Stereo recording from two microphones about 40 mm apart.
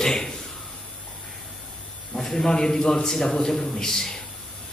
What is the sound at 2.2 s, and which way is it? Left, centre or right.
Speech, centre.